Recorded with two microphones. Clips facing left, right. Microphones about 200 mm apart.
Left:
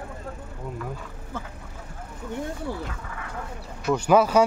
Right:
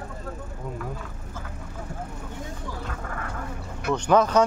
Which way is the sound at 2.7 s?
55° left (ahead or behind).